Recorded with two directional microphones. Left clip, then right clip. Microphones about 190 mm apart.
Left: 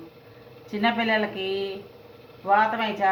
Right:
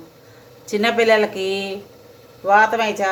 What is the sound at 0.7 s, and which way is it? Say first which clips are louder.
Speech: right 8 dB; 75° right (ahead or behind).